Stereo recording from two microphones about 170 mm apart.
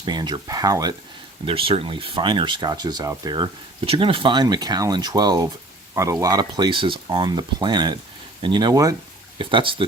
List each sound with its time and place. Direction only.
0.0 s speech: 25° right (ahead or behind)
1.5 s speech: 30° right (ahead or behind)